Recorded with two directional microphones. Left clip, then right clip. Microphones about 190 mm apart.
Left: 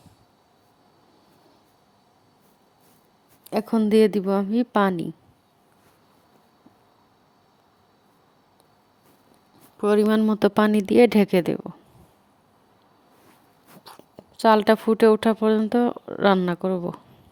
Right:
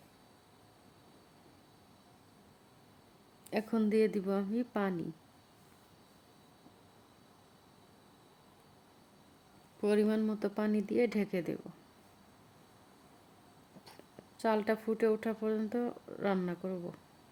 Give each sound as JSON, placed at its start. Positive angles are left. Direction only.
{"t": 3.5, "sound": "speech", "side_deg": 40}
{"t": 9.8, "sound": "speech", "side_deg": 40}
{"t": 13.8, "sound": "speech", "side_deg": 40}